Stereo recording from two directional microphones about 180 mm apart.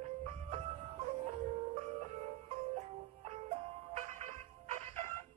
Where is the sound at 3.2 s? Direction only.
35° right (ahead or behind).